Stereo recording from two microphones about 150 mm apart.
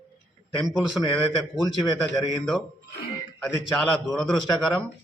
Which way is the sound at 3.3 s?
5° left (ahead or behind).